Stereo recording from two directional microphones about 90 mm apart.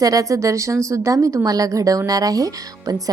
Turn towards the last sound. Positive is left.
turn(degrees=-40)  # may be behind; listen again after turning